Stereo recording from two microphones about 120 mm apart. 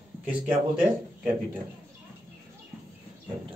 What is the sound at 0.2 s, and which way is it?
Speech, 10° right (ahead or behind).